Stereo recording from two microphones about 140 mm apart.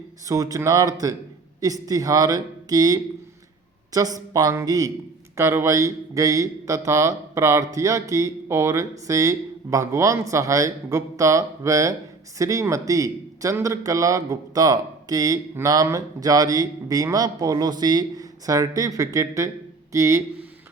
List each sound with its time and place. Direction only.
0.3 s a man's voice: 25° right (ahead or behind)